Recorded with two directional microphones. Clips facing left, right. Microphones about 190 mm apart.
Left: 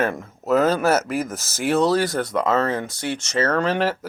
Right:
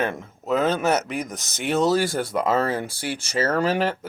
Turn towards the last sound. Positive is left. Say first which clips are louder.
# left 1 dB
turn(degrees=0)  # may be behind; listen again after turning